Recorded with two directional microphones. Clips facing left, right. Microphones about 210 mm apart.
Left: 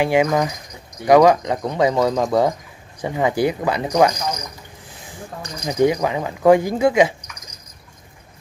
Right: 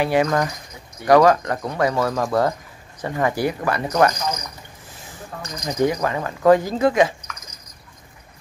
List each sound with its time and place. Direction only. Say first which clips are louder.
0.0 s speech: left 2 dB; 15° left (ahead or behind)
5.7 s speech: left 3 dB; 10° left (ahead or behind)